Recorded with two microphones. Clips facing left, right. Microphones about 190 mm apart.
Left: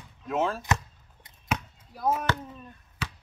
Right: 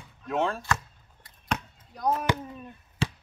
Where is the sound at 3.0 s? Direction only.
30° right (ahead or behind).